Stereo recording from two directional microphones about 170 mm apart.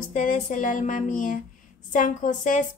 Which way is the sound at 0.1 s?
50° left (ahead or behind).